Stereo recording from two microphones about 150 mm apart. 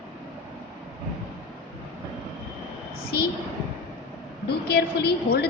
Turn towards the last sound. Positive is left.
turn(degrees=90)